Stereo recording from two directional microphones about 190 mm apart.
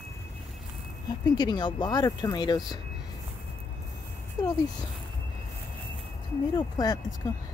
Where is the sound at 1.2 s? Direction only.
25° left (ahead or behind).